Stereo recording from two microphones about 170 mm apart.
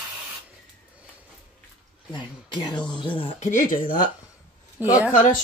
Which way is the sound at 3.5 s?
50° left (ahead or behind).